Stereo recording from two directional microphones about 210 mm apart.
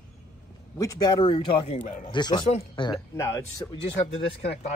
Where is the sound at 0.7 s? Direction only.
15° left (ahead or behind).